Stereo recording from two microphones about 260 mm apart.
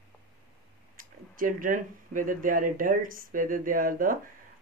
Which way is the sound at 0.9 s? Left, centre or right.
Right.